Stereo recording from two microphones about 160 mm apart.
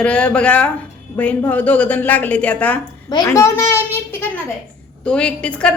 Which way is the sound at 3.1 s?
20° left (ahead or behind).